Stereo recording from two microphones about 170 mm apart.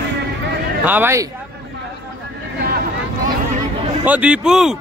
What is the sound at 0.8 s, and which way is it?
Speech, 10° right (ahead or behind).